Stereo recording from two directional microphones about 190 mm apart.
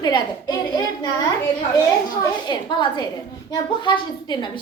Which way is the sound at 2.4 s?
25° left (ahead or behind).